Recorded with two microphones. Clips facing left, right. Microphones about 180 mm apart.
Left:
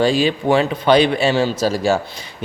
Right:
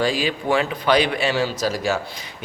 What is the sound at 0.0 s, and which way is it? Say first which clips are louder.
Speech: left 6 dB; 25° left (ahead or behind).